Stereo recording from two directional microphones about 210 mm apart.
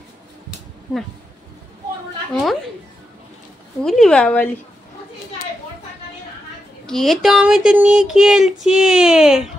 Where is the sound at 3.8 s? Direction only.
Centre (ahead or behind).